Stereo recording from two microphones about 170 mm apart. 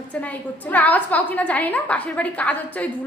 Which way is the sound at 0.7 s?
10° left (ahead or behind).